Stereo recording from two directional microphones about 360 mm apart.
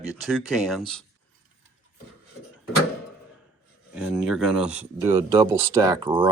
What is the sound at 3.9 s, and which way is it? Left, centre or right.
Speech, centre.